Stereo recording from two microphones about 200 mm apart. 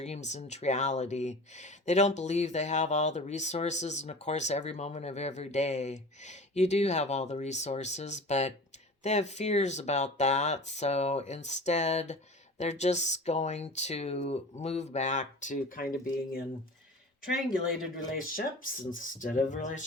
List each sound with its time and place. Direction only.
0.0 s speech: 35° left (ahead or behind)
18.1 s speech: 45° left (ahead or behind)